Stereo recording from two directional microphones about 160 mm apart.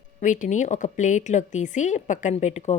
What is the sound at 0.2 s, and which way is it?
A woman's voice, 50° left (ahead or behind).